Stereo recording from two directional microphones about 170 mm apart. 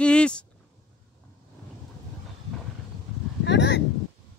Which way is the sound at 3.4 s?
90° left.